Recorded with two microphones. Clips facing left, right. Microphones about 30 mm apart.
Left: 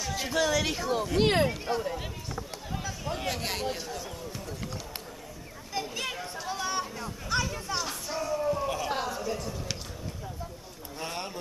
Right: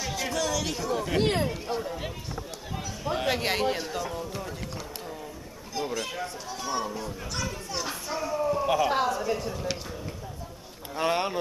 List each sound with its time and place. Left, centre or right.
0.2 s speech: centre
3.1 s speech: right
4.0 s a child's voice: centre
5.7 s chatter: centre
6.2 s speech: centre
7.7 s a child's voice: centre
11.0 s speech: right